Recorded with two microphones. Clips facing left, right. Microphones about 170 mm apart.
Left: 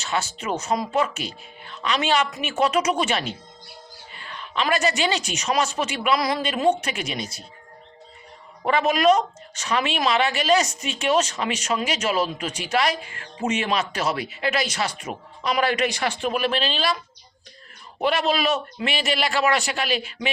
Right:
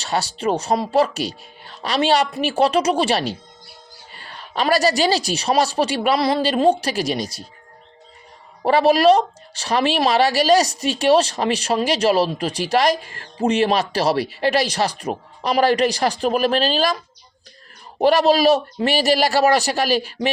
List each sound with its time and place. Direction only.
0.0 s speech: 35° right (ahead or behind)
8.6 s speech: 35° right (ahead or behind)
18.0 s speech: 40° right (ahead or behind)